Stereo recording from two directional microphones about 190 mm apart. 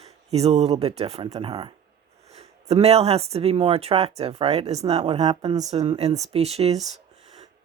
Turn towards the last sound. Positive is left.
turn(degrees=-35)  # may be behind; listen again after turning